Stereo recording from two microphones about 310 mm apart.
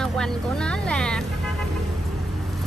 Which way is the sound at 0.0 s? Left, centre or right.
Centre.